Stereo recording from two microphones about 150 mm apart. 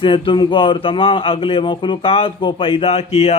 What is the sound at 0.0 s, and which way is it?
Speech, 35° left (ahead or behind).